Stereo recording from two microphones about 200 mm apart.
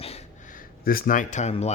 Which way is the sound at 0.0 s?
30° left (ahead or behind).